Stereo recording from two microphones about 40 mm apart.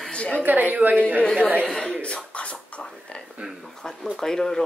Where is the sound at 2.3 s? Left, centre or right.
Left.